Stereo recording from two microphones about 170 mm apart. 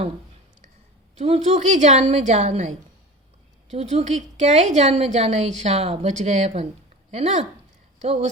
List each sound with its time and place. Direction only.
1.1 s a woman's voice: 40° right (ahead or behind)